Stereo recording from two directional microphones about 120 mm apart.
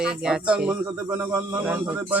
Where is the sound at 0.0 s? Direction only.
10° right (ahead or behind).